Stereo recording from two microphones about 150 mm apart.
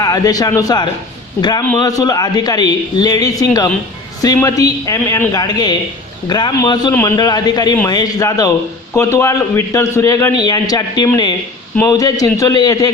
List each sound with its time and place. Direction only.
0.0 s a man's voice: 25° left (ahead or behind)